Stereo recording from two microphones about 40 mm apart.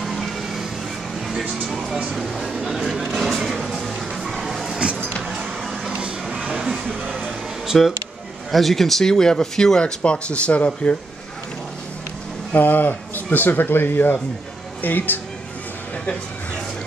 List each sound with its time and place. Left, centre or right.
0.0 s vehicle: centre
2.1 s speech: centre
2.8 s a sound: centre
4.4 s vehicle: centre
5.3 s a sound: centre
7.6 s speech: centre
8.5 s speech: centre; by 11.0 s left
12.5 s speech: left